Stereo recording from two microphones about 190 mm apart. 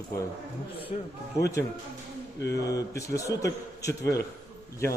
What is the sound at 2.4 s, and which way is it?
Speech, 60° left (ahead or behind).